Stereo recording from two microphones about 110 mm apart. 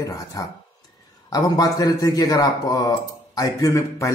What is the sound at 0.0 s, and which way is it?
A man's voice, 30° left (ahead or behind).